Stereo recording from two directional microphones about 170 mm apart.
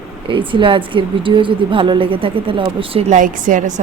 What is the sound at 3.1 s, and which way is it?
Speech, 50° right (ahead or behind).